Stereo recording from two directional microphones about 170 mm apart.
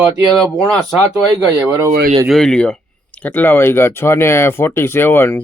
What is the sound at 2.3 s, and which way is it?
Speech, 5° left (ahead or behind).